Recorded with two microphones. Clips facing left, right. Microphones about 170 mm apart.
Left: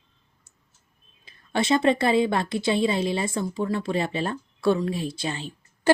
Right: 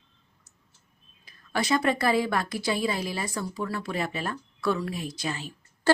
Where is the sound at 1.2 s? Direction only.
25° left (ahead or behind).